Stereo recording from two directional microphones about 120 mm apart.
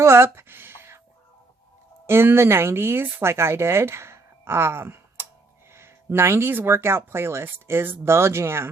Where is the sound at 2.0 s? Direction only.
20° right (ahead or behind).